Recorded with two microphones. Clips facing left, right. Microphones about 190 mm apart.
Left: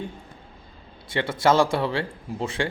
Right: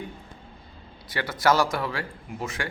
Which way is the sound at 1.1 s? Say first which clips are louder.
Left 3 dB; 25° left (ahead or behind).